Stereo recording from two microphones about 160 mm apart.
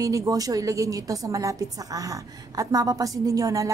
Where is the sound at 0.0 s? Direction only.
20° right (ahead or behind).